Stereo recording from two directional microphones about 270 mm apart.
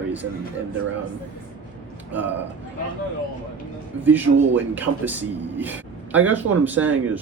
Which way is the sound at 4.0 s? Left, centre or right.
Centre.